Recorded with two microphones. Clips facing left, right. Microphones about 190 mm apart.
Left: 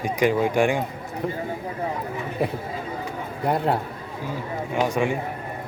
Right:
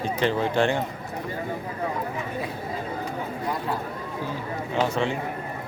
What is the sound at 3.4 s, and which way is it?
Speech, 60° left (ahead or behind).